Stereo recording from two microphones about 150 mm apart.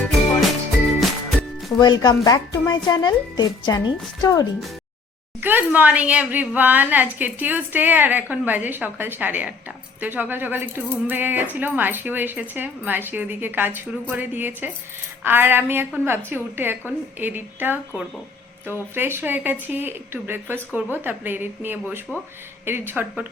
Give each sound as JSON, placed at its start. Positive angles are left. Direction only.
{"t": 0.9, "sound": "music", "side_deg": 0}
{"t": 1.8, "sound": "speech", "side_deg": 25}
{"t": 5.4, "sound": "a woman's voice", "side_deg": -10}